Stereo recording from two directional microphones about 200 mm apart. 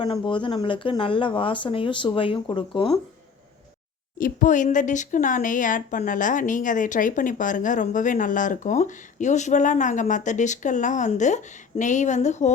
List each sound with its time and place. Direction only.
0.0 s speech: 25° left (ahead or behind)
4.2 s speech: 40° left (ahead or behind)